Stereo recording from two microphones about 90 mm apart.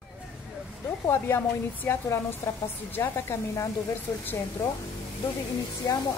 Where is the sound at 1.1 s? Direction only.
25° left (ahead or behind).